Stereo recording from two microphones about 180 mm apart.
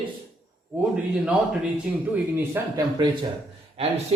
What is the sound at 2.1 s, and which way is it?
Speech, 10° right (ahead or behind).